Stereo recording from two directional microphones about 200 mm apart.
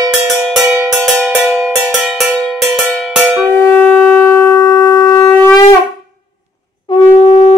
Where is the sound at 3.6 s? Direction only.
10° left (ahead or behind).